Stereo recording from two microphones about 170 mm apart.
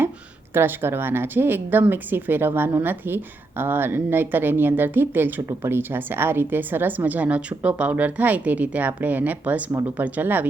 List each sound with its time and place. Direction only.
0.5 s speech: 15° right (ahead or behind)